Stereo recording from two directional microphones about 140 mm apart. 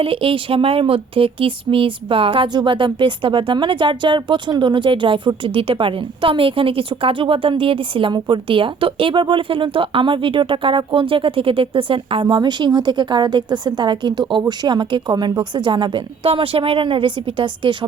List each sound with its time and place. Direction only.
0.0 s a woman's voice: 40° right (ahead or behind)